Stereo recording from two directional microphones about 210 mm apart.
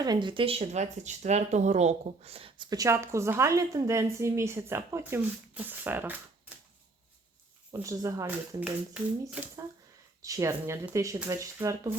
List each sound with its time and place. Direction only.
0.0 s speech: 20° right (ahead or behind)
7.7 s speech: 15° right (ahead or behind)